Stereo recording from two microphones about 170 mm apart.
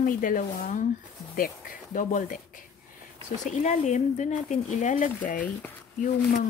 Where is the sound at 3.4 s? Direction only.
45° left (ahead or behind).